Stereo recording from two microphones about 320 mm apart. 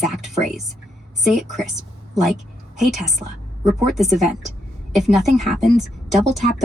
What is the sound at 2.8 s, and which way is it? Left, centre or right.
A woman's voice, centre.